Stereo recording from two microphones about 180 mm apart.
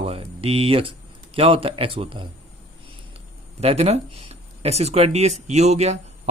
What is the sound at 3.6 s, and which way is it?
Speech, 35° right (ahead or behind).